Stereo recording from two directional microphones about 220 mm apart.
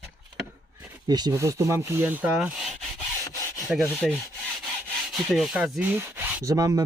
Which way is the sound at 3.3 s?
15° left (ahead or behind).